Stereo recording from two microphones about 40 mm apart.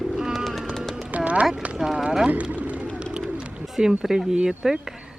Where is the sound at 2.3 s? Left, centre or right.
Right.